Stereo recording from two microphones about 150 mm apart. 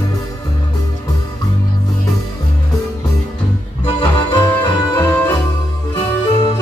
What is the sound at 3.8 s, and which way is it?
Music, 30° left (ahead or behind).